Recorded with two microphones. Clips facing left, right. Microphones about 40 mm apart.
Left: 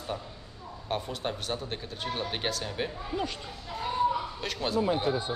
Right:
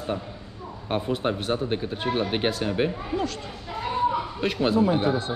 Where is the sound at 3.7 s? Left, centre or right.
Right.